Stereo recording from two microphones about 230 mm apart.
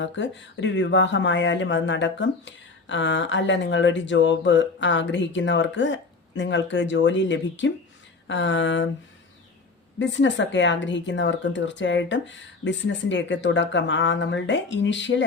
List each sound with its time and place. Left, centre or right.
0.0 s speech: left
10.0 s speech: left